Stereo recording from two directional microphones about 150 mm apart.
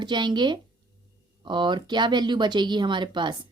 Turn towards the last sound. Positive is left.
turn(degrees=-30)  # may be behind; listen again after turning